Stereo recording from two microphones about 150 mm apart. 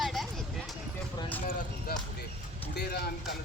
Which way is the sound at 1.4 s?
65° left (ahead or behind).